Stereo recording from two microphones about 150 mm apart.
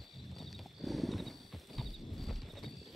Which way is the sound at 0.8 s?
Centre (ahead or behind).